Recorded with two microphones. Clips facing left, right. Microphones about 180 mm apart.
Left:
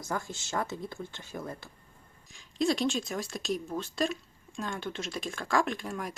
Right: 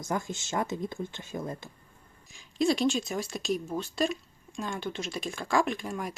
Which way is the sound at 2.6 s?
Centre (ahead or behind).